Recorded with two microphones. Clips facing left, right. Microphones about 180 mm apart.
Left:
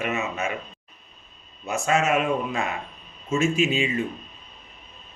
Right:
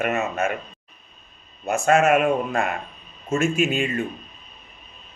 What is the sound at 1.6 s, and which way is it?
Speech, 55° right (ahead or behind).